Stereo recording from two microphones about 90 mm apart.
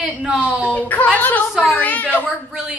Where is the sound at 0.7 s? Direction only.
15° left (ahead or behind).